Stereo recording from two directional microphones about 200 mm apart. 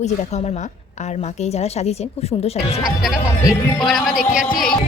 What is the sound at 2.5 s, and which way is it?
Speech, centre (ahead or behind).